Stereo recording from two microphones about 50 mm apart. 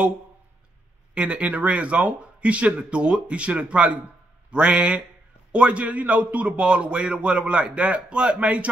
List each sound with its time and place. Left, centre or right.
1.1 s a man's voice: right